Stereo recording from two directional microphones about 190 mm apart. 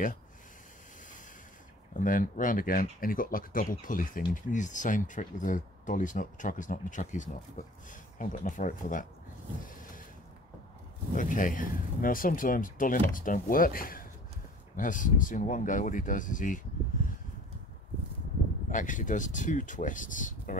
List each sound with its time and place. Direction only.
2.0 s speech: 45° left (ahead or behind)
11.1 s speech: 45° left (ahead or behind)
18.7 s speech: 40° left (ahead or behind)